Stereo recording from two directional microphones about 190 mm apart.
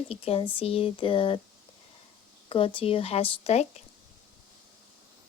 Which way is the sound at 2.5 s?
30° left (ahead or behind).